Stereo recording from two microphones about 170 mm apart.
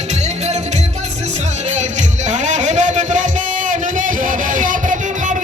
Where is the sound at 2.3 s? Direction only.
45° right (ahead or behind).